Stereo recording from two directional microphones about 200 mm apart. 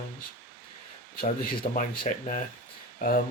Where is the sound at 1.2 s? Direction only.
45° left (ahead or behind).